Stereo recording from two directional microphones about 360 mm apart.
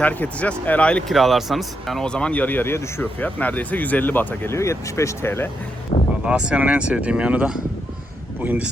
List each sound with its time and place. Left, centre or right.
0.0 s speech: centre
5.9 s music: centre
6.2 s speech: centre